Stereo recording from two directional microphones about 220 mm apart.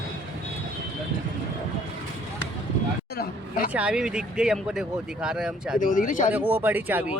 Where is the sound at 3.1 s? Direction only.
45° left (ahead or behind).